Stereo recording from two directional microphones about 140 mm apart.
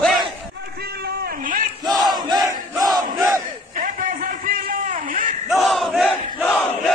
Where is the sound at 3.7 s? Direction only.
75° right (ahead or behind).